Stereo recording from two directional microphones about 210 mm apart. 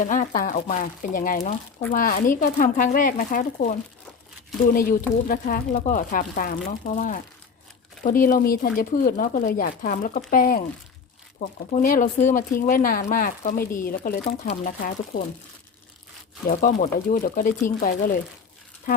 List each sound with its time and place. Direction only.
0.0 s speech: 40° left (ahead or behind)
16.5 s speech: 40° left (ahead or behind)